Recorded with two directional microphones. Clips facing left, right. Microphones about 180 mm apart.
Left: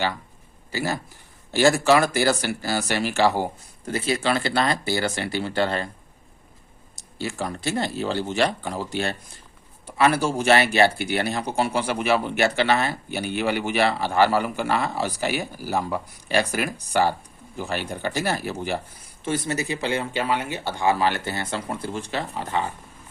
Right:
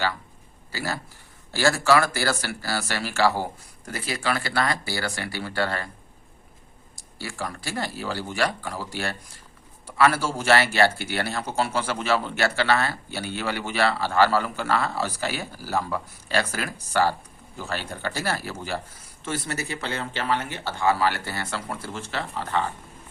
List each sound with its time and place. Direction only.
0.7 s speech: 20° left (ahead or behind)
6.9 s speech: 20° left (ahead or behind)